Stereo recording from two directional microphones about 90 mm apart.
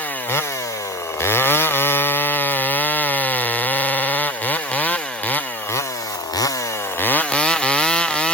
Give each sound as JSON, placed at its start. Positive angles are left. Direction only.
{"t": 1.2, "sound": "chainsaw", "side_deg": 25}
{"t": 7.0, "sound": "chainsaw", "side_deg": 20}